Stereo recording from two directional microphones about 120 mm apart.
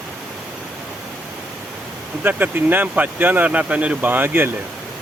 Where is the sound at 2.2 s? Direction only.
15° right (ahead or behind).